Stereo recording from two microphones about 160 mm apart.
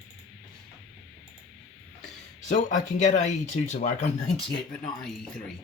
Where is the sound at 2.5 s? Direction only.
50° left (ahead or behind).